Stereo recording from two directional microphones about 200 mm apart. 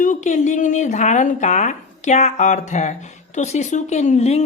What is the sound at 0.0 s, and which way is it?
Speech, 40° left (ahead or behind).